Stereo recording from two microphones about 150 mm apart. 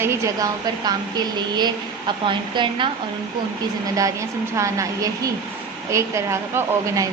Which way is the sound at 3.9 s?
20° right (ahead or behind).